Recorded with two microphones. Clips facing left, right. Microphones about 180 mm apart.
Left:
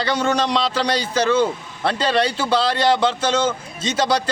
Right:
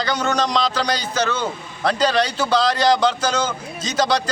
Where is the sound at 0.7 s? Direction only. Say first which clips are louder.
Left 2 dB; 30° left (ahead or behind).